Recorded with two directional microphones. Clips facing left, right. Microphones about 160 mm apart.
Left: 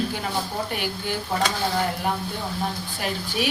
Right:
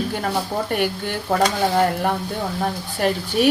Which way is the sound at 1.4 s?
50° right (ahead or behind).